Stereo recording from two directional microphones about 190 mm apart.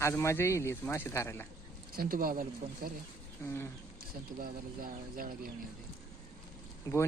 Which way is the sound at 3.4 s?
10° left (ahead or behind).